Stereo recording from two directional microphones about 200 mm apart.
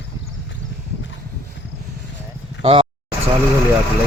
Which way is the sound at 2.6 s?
30° right (ahead or behind).